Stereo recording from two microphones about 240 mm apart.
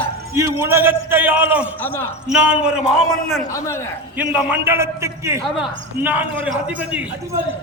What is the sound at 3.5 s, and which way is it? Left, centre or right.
Speech, centre.